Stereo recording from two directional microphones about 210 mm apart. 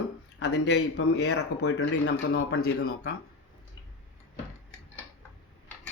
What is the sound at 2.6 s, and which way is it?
Speech, 90° left.